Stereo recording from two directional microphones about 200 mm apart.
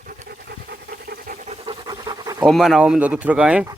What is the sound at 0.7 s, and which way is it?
Pant, 50° right (ahead or behind).